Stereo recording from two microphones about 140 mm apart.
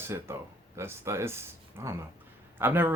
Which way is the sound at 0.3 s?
15° right (ahead or behind).